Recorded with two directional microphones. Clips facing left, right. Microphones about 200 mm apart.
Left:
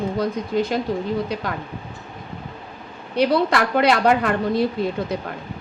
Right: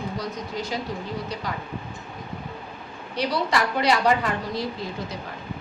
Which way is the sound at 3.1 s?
60° left (ahead or behind).